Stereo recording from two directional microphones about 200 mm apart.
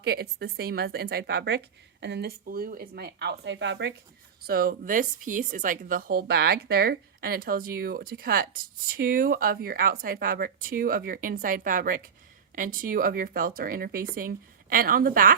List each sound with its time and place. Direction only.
0.0 s a woman's voice: 55° right (ahead or behind)
4.4 s a woman's voice: 50° right (ahead or behind)